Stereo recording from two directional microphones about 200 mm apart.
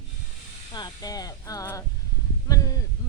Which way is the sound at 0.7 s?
20° left (ahead or behind).